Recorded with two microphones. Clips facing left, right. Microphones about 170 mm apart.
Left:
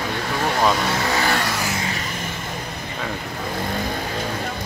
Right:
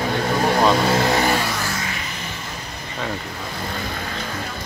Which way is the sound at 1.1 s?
20° right (ahead or behind).